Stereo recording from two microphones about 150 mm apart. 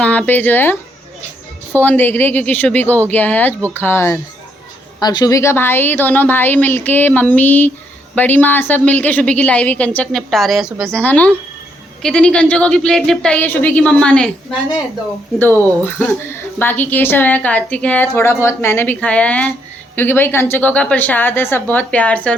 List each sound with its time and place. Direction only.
0.0 s speech: 10° left (ahead or behind)
4.9 s speech: 25° left (ahead or behind); by 10.9 s 5° right (ahead or behind)
10.9 s speech: 10° left (ahead or behind)
15.4 s speech: 15° left (ahead or behind)